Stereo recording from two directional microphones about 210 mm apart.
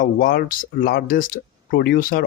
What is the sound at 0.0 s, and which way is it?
Speech, 45° left (ahead or behind).